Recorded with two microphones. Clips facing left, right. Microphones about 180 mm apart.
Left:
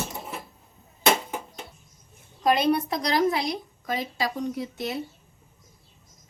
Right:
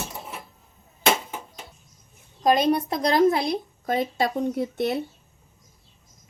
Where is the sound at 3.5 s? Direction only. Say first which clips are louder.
Right 5 dB; 55° right (ahead or behind).